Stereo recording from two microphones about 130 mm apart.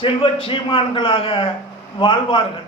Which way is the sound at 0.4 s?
40° left (ahead or behind).